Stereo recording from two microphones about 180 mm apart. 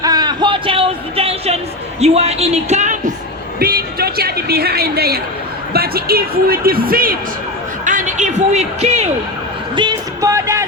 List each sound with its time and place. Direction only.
0.0 s music: 20° right (ahead or behind)
2.0 s speech: 35° right (ahead or behind)
3.6 s a sound: 55° right (ahead or behind)
5.7 s a woman's voice: 60° right (ahead or behind)
7.9 s a sound: 45° right (ahead or behind)
9.7 s music: 25° right (ahead or behind)